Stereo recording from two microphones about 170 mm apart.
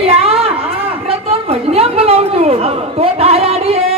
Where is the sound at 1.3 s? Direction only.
35° right (ahead or behind).